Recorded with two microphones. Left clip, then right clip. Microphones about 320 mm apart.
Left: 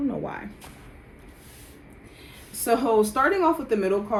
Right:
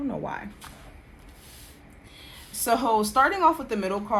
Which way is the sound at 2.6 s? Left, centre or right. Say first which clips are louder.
Left 2 dB; right.